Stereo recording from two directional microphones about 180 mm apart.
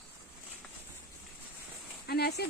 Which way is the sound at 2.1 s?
60° left (ahead or behind).